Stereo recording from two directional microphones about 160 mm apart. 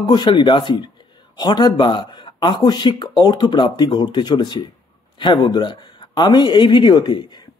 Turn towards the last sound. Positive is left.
turn(degrees=30)  # may be behind; listen again after turning